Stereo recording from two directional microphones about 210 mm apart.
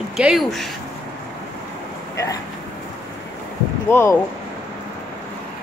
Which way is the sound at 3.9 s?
15° left (ahead or behind).